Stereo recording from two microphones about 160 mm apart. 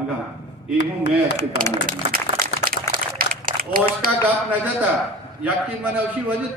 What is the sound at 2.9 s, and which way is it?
Crumpling, 60° right (ahead or behind).